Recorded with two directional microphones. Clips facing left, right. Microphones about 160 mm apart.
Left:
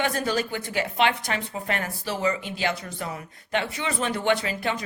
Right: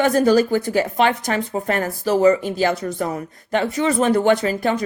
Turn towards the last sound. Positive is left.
turn(degrees=-40)  # may be behind; listen again after turning